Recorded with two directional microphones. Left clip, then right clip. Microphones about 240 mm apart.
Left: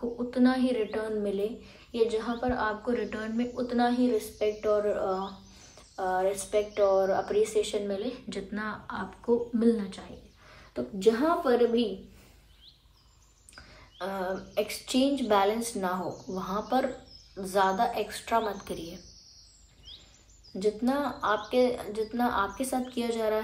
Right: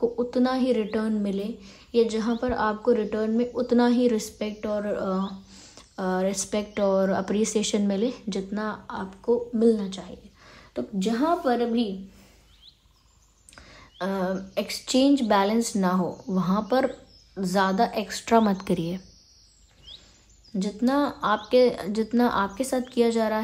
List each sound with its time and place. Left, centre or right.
0.3 s a woman's voice: right
4.4 s a woman's voice: right; by 10.0 s centre
10.7 s a woman's voice: right
13.9 s a woman's voice: right
20.5 s a woman's voice: right